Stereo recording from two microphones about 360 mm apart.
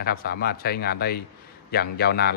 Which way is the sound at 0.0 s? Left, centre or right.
Left.